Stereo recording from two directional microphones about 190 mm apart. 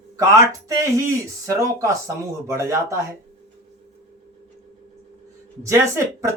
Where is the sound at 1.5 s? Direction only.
15° right (ahead or behind).